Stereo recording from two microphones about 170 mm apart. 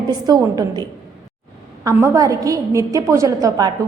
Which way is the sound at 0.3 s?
20° right (ahead or behind).